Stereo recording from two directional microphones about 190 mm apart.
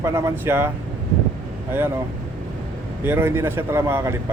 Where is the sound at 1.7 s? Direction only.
10° right (ahead or behind).